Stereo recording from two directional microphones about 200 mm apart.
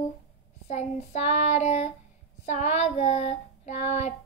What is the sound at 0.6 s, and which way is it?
Speech, 35° left (ahead or behind).